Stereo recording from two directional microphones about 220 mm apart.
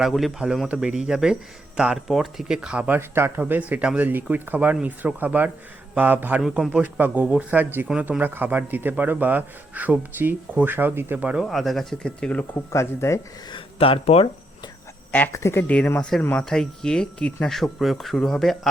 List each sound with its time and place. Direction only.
0.0 s a man's voice: centre (ahead or behind)
13.7 s speech: 25° left (ahead or behind)
15.1 s speech: 10° left (ahead or behind)